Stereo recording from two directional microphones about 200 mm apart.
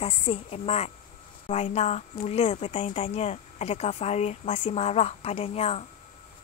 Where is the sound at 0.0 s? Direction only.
30° left (ahead or behind).